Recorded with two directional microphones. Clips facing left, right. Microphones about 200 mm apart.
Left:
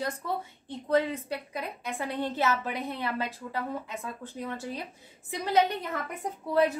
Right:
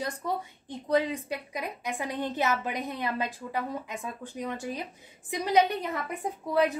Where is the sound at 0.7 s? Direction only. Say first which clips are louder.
Even; 15° right (ahead or behind).